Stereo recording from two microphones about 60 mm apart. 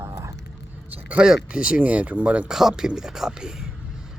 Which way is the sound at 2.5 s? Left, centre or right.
Centre.